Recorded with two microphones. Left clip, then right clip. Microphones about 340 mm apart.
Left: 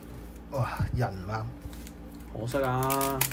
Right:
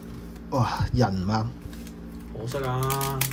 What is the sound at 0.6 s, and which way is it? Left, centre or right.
Speech, centre.